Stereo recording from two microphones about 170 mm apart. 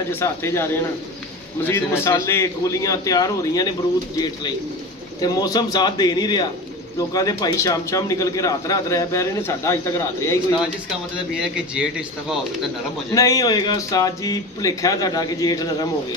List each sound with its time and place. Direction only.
0.1 s speech: 15° left (ahead or behind)
1.7 s a man's voice: 15° left (ahead or behind)
10.9 s a man's voice: 5° right (ahead or behind)
13.1 s a man's voice: 20° left (ahead or behind)